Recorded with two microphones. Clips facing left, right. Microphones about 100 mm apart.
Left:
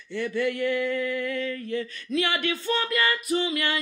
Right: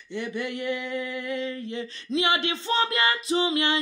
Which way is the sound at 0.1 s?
20° right (ahead or behind).